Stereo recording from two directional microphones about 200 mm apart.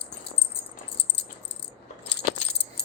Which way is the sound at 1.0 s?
60° left (ahead or behind).